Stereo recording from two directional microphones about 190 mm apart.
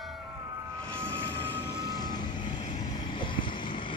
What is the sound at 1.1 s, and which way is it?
Vehicle, 10° left (ahead or behind).